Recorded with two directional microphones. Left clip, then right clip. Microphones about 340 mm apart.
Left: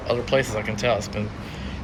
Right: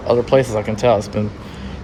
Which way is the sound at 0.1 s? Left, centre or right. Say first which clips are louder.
Right 8 dB; centre.